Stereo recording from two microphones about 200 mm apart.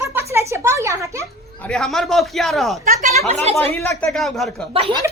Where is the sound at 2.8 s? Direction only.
40° right (ahead or behind).